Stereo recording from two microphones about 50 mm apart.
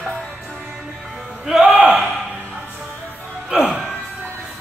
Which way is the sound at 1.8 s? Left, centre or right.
Right.